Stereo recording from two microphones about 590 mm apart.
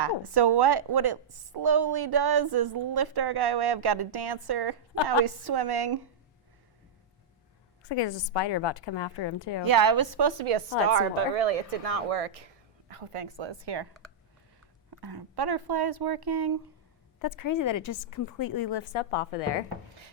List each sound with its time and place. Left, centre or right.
0.0 s a woman's voice: right
7.9 s a woman's voice: left
9.6 s a woman's voice: right
10.8 s a woman's voice: right
14.8 s a woman's voice: right
17.2 s speech: left
19.1 s a woman's voice: left